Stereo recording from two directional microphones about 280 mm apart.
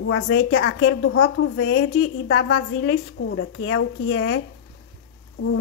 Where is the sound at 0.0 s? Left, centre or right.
Left.